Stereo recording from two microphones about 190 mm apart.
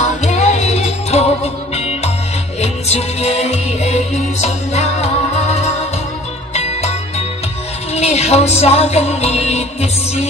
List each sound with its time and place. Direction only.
0.0 s music: 35° left (ahead or behind)